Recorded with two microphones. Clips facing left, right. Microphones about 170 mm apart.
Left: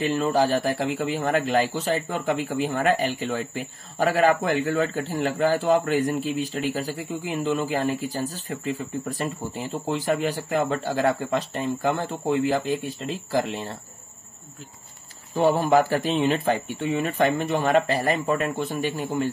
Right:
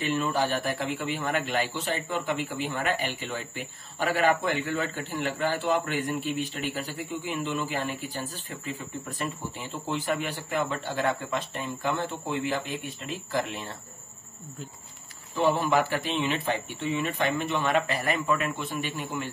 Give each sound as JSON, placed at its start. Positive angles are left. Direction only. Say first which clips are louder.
{"t": 0.0, "sound": "speech", "louder": "left 5 dB", "side_deg": 35}
{"t": 15.3, "sound": "speech", "louder": "left 5 dB", "side_deg": 45}